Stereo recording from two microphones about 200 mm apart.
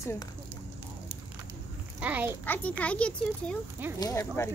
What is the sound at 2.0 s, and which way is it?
Speech, 5° right (ahead or behind).